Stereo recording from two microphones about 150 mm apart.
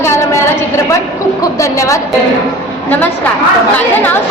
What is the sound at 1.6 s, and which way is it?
Speech, 20° left (ahead or behind).